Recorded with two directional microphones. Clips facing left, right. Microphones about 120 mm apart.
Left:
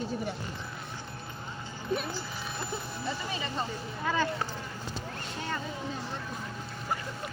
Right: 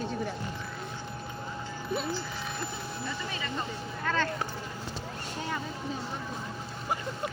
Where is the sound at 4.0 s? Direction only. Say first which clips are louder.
Left 1 dB; 10° left (ahead or behind).